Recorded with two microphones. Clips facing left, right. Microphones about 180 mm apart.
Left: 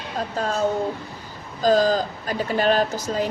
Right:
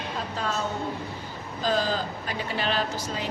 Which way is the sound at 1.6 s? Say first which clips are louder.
Left 8 dB; 40° left (ahead or behind).